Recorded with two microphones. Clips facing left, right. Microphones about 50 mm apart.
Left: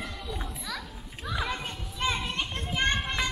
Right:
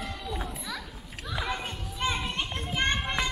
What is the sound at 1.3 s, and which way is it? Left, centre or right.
Children playing, centre.